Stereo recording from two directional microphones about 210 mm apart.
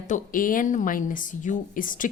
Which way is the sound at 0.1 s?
40° left (ahead or behind).